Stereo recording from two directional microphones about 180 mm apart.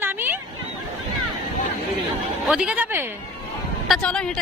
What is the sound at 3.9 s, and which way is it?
Speech, 5° left (ahead or behind).